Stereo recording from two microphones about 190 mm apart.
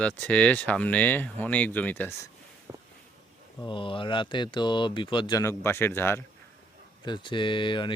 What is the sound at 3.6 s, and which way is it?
Speech, 25° left (ahead or behind).